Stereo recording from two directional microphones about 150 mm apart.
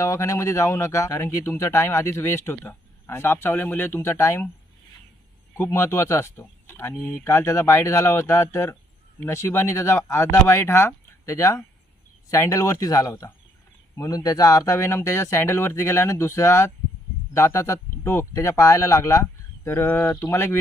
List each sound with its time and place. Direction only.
0.0 s speech: 20° left (ahead or behind)
5.6 s speech: 15° left (ahead or behind)